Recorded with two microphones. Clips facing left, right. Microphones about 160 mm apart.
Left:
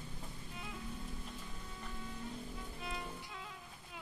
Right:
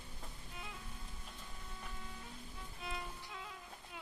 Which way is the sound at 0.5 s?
Centre (ahead or behind).